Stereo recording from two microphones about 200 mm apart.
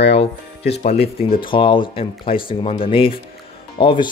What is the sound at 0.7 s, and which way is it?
Speech, 30° left (ahead or behind).